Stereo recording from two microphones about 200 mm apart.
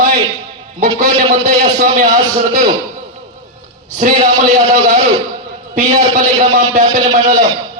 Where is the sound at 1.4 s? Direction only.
40° right (ahead or behind).